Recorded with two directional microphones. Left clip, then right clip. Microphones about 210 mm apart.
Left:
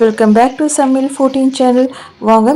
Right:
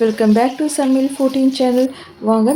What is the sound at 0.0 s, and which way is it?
Speech, 10° left (ahead or behind).